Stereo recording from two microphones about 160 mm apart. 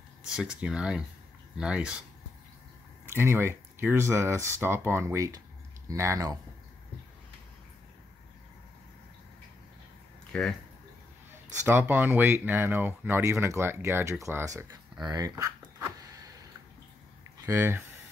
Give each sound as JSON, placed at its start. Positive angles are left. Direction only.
{"t": 0.3, "sound": "speech", "side_deg": -5}
{"t": 3.1, "sound": "speech", "side_deg": -15}
{"t": 10.3, "sound": "speech", "side_deg": 5}
{"t": 11.6, "sound": "speech", "side_deg": -10}
{"t": 17.5, "sound": "speech", "side_deg": -15}